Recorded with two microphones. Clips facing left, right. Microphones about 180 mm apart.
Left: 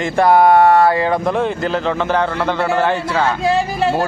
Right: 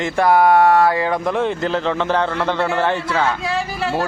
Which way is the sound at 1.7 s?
10° left (ahead or behind).